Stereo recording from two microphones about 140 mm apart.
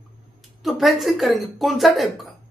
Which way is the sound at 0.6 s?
Centre (ahead or behind).